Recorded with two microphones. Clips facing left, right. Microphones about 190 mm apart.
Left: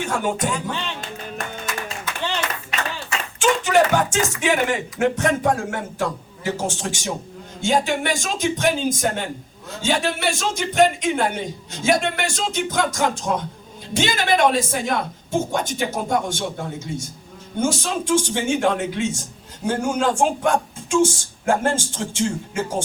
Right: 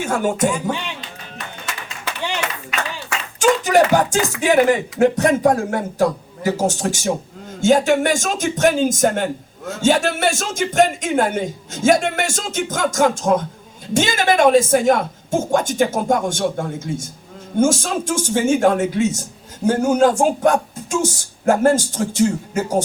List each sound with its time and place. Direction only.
0.0 s speech: 45° right (ahead or behind)
0.5 s speech: 15° right (ahead or behind)
3.3 s speech: 40° right (ahead or behind)